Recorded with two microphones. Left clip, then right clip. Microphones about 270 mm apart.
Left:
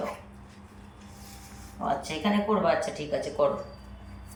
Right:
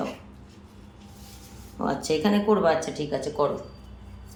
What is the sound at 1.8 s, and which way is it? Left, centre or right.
Speech, centre.